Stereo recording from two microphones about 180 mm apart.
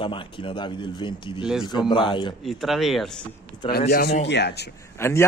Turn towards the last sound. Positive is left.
turn(degrees=15)  # may be behind; listen again after turning